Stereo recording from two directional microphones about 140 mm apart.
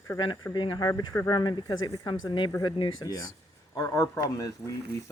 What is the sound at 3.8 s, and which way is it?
Speech, 20° left (ahead or behind).